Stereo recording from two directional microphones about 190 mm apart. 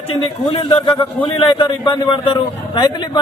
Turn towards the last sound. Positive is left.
turn(degrees=25)  # may be behind; listen again after turning